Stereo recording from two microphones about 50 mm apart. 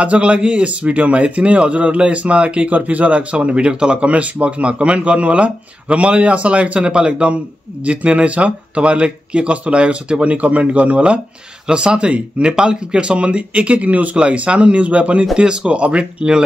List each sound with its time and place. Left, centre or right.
0.0 s speech: right